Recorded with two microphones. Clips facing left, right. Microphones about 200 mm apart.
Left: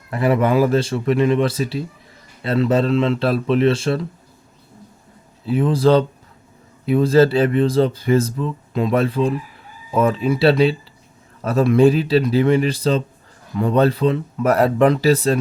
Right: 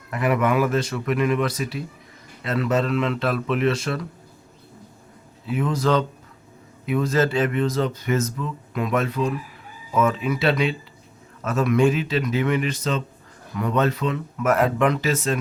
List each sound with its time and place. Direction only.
0.1 s speech: 30° left (ahead or behind)
5.5 s speech: 30° left (ahead or behind)